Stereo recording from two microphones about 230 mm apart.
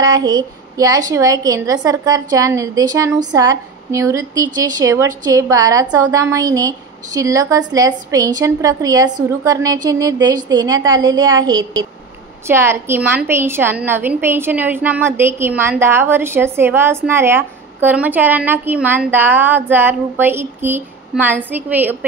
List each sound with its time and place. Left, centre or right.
0.0 s a woman's voice: centre